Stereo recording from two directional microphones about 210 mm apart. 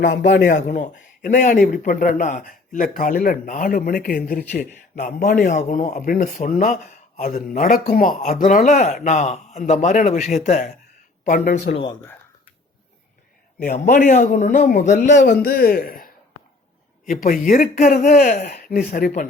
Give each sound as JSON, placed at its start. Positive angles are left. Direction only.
{"t": 0.0, "sound": "a man's voice", "side_deg": 40}
{"t": 13.6, "sound": "a man's voice", "side_deg": 40}
{"t": 15.3, "sound": "a man's voice", "side_deg": 45}